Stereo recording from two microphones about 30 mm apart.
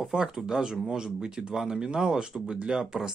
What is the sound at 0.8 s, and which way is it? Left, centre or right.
Speech, right.